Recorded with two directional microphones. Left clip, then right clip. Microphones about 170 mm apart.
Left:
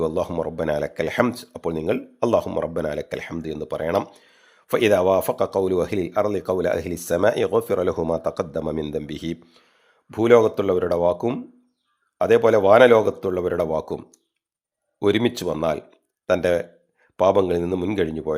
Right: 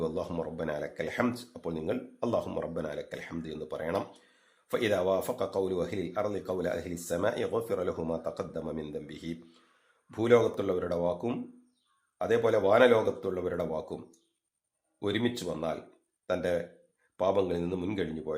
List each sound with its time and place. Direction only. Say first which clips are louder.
0.0 s speech: left 10 dB; 40° left (ahead or behind)